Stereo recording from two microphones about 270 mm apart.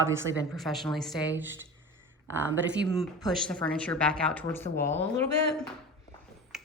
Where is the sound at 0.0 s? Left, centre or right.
Centre.